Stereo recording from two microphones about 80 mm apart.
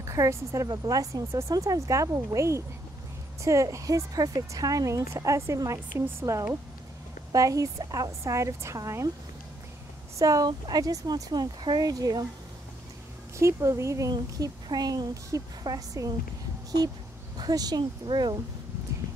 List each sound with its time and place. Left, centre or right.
0.0 s speech: right
7.3 s speech: right
10.1 s speech: right
13.4 s speech: right
14.1 s speech: right
17.4 s speech: right